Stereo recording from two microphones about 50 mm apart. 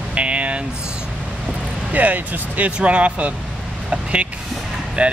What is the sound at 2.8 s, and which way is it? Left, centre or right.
Speech, right.